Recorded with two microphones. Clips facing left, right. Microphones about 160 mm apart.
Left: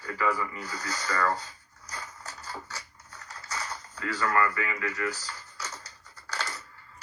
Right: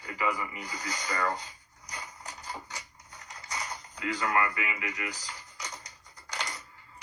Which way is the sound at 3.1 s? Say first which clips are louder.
Left 2 dB; 15° right (ahead or behind).